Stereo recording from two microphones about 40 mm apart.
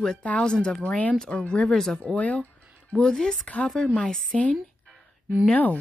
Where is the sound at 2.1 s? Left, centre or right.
Left.